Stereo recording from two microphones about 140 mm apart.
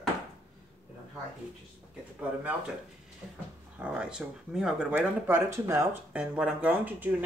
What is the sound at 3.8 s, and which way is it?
Speech, 5° right (ahead or behind).